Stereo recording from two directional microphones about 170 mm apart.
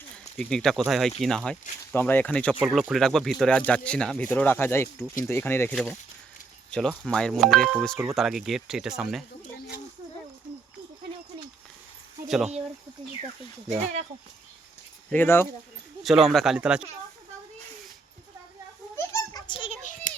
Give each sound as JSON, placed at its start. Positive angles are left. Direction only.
{"t": 0.3, "sound": "speech", "side_deg": 0}
{"t": 2.6, "sound": "speech", "side_deg": -5}
{"t": 15.1, "sound": "speech", "side_deg": 10}
{"t": 16.0, "sound": "speech", "side_deg": 0}
{"t": 18.9, "sound": "a sound", "side_deg": 20}
{"t": 19.8, "sound": "a sound", "side_deg": 45}